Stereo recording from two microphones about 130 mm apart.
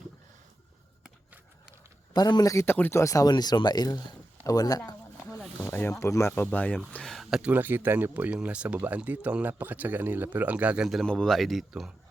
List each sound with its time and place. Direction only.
2.1 s speech: 30° left (ahead or behind)
5.3 s a sound: 5° left (ahead or behind)
5.6 s speech: 20° left (ahead or behind); by 11.9 s 5° right (ahead or behind)